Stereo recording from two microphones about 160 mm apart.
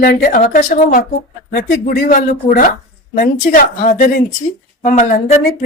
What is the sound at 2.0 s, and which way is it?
A woman's voice, 60° left (ahead or behind).